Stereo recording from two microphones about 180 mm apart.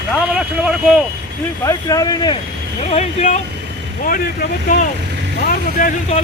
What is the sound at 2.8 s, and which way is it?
Speech, 40° left (ahead or behind).